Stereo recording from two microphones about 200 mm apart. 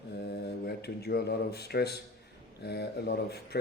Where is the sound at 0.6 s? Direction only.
50° left (ahead or behind).